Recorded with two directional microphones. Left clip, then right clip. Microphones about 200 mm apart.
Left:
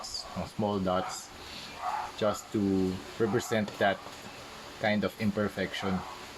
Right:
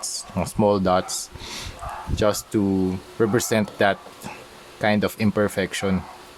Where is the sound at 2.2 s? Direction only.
55° right (ahead or behind).